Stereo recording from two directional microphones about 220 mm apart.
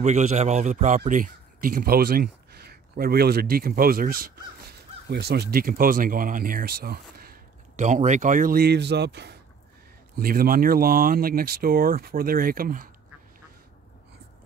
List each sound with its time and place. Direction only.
0.0 s a man's voice: 30° right (ahead or behind)